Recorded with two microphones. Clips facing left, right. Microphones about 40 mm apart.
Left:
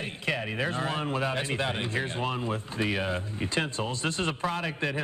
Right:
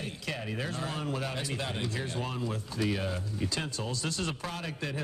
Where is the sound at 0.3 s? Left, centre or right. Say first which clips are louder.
Left 7 dB; left.